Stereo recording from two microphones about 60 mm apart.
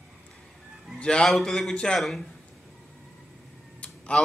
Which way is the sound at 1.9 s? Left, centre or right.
Centre.